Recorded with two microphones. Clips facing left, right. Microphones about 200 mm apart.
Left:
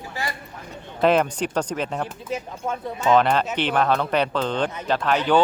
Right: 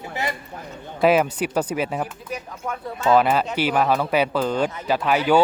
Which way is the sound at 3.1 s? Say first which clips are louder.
Right 1 dB; 5° right (ahead or behind).